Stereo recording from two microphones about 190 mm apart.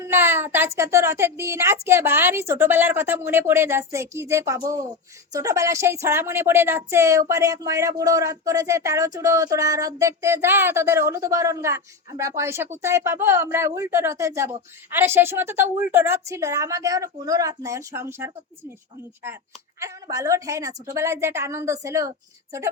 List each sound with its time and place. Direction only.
0.0 s speech: 10° right (ahead or behind)
19.8 s speech: 15° right (ahead or behind)